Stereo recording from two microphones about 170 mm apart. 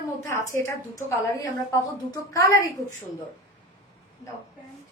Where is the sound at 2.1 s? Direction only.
20° left (ahead or behind).